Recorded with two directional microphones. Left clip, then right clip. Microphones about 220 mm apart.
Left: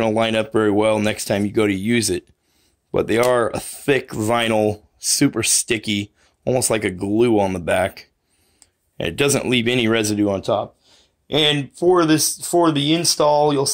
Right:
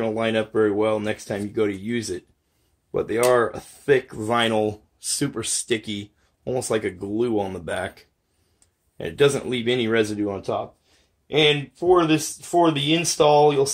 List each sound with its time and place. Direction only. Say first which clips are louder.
0.0 s speech: left 5 dB; 45° left (ahead or behind)